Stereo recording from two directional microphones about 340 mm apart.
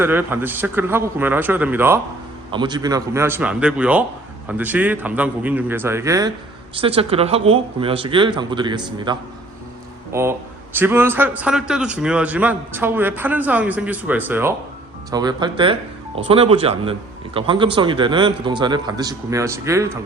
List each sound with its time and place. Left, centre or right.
0.0 s a man's voice: centre